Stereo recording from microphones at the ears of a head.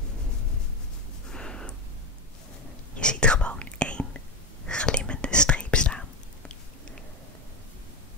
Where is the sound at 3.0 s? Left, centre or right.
Centre.